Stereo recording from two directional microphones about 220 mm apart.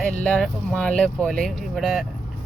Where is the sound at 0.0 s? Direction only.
5° left (ahead or behind).